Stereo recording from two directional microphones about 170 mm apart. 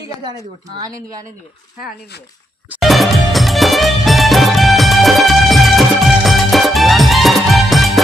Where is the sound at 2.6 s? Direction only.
Centre (ahead or behind).